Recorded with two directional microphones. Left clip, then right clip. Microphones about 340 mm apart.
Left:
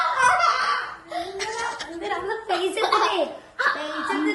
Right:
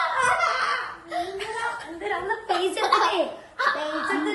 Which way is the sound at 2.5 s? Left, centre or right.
Centre.